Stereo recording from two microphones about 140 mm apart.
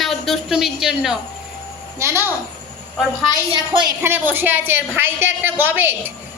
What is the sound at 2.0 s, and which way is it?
Speech, 20° right (ahead or behind).